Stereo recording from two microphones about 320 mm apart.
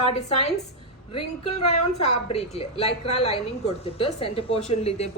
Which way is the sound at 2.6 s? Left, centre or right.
Centre.